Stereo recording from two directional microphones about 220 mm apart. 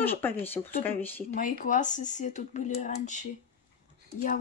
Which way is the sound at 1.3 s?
35° left (ahead or behind).